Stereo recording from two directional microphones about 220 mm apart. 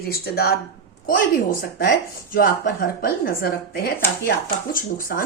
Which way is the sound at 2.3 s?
40° left (ahead or behind).